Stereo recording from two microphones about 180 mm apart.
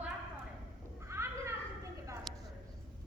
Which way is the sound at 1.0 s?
15° right (ahead or behind).